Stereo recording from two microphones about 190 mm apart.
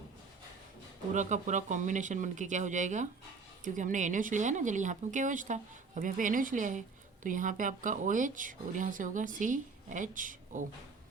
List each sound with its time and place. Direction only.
1.1 s speech: 40° right (ahead or behind)